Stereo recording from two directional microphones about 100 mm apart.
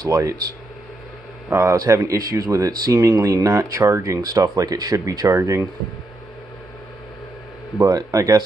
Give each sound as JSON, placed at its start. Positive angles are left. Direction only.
{"t": 0.0, "sound": "speech", "side_deg": -35}
{"t": 1.5, "sound": "speech", "side_deg": -30}
{"t": 7.8, "sound": "speech", "side_deg": -35}